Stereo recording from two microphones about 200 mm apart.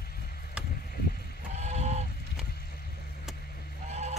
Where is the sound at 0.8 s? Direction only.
50° left (ahead or behind).